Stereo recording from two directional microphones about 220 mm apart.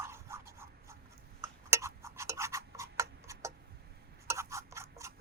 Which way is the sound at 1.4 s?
10° right (ahead or behind).